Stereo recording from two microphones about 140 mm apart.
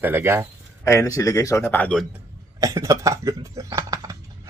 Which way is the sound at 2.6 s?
25° right (ahead or behind).